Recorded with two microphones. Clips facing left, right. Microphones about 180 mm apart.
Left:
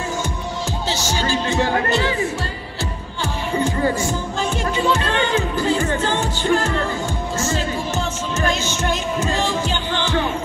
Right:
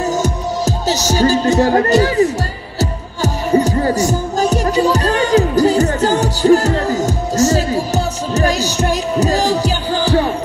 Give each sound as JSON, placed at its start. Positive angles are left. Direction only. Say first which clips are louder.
{"t": 0.1, "sound": "music", "louder": "right 7 dB", "side_deg": -40}